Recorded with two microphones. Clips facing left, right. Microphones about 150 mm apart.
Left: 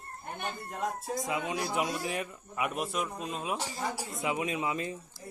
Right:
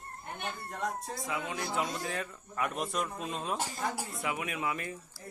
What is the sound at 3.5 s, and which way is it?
Speech, 50° right (ahead or behind).